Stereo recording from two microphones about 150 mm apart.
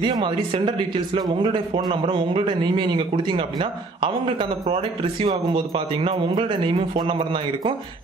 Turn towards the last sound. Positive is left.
turn(degrees=-35)  # may be behind; listen again after turning